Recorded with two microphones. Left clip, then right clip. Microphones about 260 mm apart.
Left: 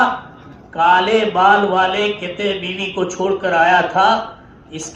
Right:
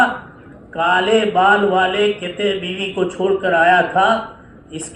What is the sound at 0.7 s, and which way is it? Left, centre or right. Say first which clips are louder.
A man's voice: left 2 dB; centre.